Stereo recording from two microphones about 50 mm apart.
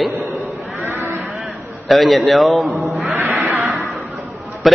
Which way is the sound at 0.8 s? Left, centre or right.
Right.